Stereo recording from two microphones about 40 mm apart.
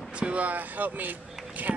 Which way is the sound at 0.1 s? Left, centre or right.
Right.